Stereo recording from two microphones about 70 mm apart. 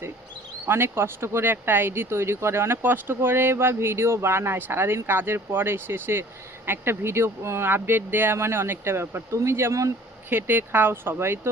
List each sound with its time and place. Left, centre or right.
0.7 s speech: right
10.2 s speech: right